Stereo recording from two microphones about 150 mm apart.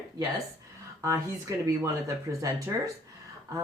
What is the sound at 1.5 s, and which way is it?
Speech, 20° right (ahead or behind).